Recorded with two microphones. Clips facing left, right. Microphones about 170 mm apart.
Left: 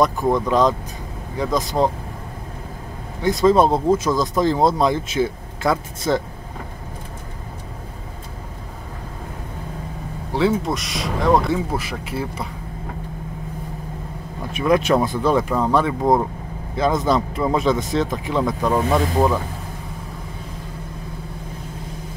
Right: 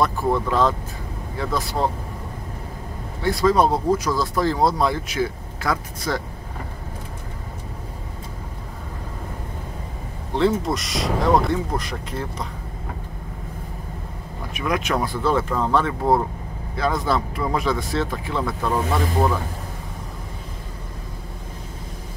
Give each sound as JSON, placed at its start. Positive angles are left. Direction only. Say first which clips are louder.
{"t": 0.0, "sound": "speech", "louder": "left 3 dB", "side_deg": 15}
{"t": 3.2, "sound": "speech", "louder": "left 3 dB", "side_deg": 20}
{"t": 10.3, "sound": "speech", "louder": "left 1 dB", "side_deg": 0}
{"t": 14.5, "sound": "speech", "louder": "left 7 dB", "side_deg": 30}